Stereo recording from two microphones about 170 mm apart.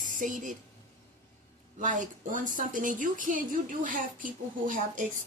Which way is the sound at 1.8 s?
50° right (ahead or behind).